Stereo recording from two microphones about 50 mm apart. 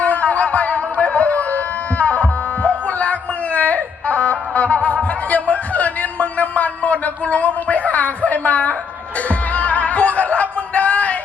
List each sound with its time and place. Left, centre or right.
0.0 s music: left
5.3 s a sound: left
9.6 s music: left